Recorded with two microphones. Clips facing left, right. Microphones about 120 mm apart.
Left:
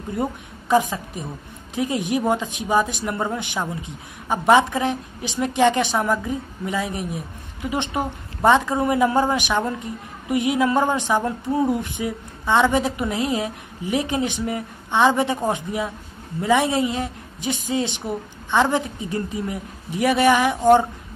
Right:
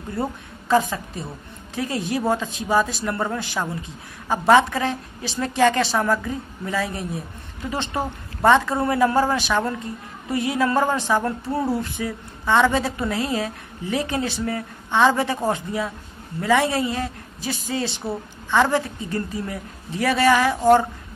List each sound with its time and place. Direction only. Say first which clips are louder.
0.1 s a woman's voice: left 1 dB; 15° left (ahead or behind)